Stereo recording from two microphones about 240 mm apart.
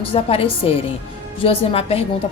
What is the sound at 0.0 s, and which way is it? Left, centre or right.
A woman's voice, left.